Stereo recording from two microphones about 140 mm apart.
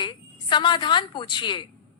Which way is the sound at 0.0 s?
35° left (ahead or behind).